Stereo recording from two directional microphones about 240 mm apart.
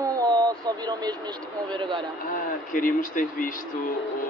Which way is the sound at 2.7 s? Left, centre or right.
Left.